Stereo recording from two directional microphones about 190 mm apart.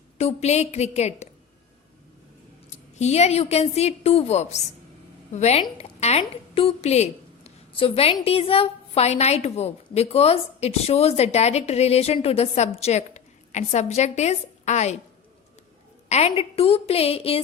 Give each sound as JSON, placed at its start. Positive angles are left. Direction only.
{"t": 0.2, "sound": "a woman's voice", "side_deg": 35}
{"t": 2.6, "sound": "a woman's voice", "side_deg": 35}
{"t": 16.0, "sound": "a woman's voice", "side_deg": 35}